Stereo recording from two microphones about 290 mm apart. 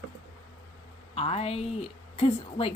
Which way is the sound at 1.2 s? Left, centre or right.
Centre.